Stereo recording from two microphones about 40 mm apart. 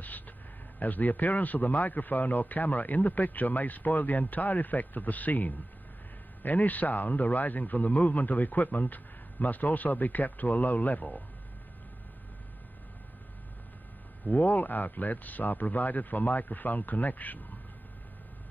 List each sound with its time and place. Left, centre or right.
0.7 s speech: left
14.2 s speech: left